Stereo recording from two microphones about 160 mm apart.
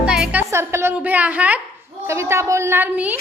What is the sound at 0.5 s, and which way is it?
A woman's voice, 15° right (ahead or behind).